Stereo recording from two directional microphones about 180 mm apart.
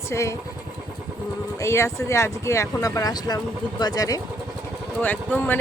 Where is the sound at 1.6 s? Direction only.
15° left (ahead or behind).